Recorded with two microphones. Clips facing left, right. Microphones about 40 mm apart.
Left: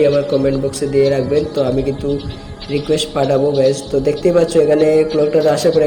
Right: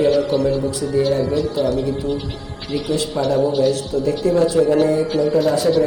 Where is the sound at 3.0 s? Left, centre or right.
Left.